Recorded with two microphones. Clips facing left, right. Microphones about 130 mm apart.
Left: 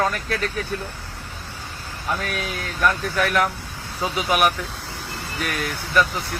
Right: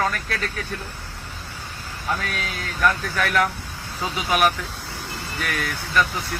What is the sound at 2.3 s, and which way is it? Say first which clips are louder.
Speech: left 2 dB; 15° left (ahead or behind).